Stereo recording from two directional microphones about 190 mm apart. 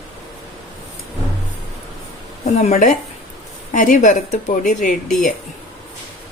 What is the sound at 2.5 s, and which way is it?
A woman's voice, 35° left (ahead or behind).